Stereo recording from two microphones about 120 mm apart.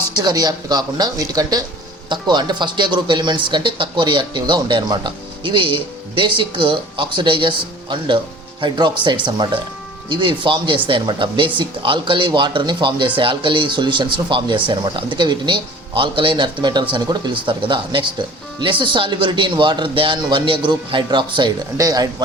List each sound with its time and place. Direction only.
0.1 s speech: 35° right (ahead or behind)
21.8 s speech: 30° right (ahead or behind)